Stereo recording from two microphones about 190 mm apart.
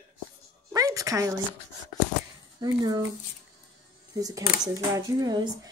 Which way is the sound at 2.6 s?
20° right (ahead or behind).